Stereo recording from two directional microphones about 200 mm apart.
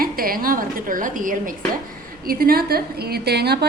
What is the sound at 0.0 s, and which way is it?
A woman's voice, 45° right (ahead or behind).